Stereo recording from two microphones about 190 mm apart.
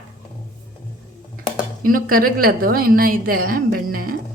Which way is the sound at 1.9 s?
50° right (ahead or behind).